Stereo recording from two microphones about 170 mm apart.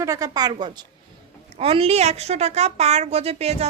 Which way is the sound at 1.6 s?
35° right (ahead or behind).